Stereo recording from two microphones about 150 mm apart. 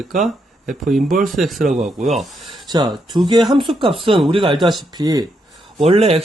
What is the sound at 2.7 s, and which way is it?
Speech, 30° right (ahead or behind).